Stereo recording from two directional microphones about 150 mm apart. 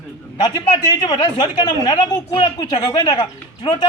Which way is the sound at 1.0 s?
30° left (ahead or behind).